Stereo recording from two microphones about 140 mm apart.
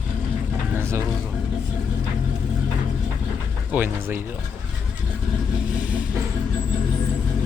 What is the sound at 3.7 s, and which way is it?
Speech, 15° right (ahead or behind).